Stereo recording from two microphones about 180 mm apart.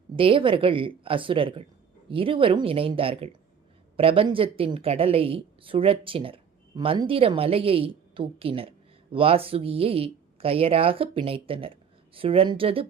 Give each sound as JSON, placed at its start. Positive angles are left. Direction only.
{"t": 0.2, "sound": "a woman's voice", "side_deg": -30}